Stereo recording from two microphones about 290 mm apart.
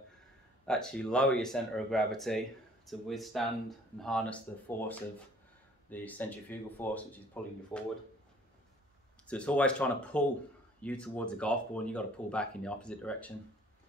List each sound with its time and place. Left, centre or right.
0.7 s speech: centre
9.3 s speech: centre